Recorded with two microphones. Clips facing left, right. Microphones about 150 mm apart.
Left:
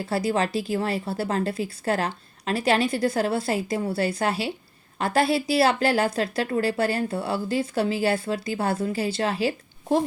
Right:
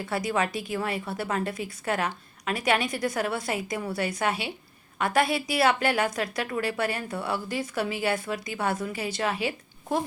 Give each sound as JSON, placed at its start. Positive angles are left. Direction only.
{"t": 0.0, "sound": "a woman's voice", "side_deg": 30}